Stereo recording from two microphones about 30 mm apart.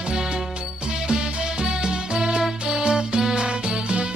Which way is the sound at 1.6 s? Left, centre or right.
Right.